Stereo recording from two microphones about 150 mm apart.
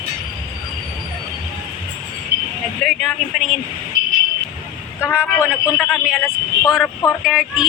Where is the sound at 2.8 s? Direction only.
5° left (ahead or behind).